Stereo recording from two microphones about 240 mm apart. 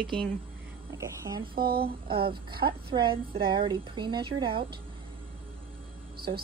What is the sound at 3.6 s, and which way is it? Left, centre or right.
Speech, centre.